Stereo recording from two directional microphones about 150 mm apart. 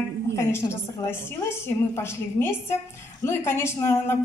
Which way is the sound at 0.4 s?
15° left (ahead or behind).